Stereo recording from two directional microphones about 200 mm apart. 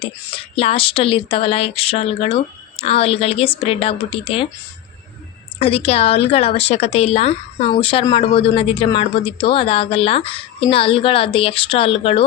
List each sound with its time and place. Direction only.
0.0 s a woman's voice: 25° left (ahead or behind)
5.5 s a woman's voice: 30° left (ahead or behind)